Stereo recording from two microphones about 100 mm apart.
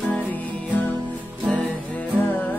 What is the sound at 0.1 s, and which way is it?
Music, 15° left (ahead or behind).